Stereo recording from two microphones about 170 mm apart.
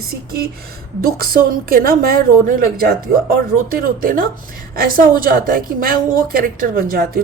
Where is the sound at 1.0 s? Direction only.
60° right (ahead or behind).